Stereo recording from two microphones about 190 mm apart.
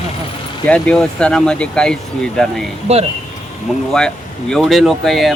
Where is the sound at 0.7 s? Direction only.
5° left (ahead or behind).